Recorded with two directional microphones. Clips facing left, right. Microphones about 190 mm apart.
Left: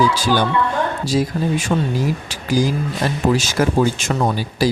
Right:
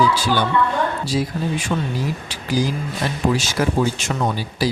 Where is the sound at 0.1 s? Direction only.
45° left (ahead or behind).